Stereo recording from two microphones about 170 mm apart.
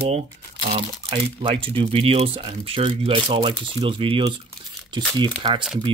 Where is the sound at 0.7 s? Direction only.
35° right (ahead or behind).